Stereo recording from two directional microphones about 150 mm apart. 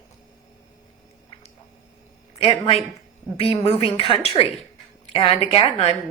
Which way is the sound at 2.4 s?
40° left (ahead or behind).